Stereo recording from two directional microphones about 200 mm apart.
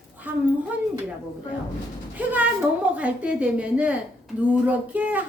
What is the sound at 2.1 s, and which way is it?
A woman's voice, 5° right (ahead or behind).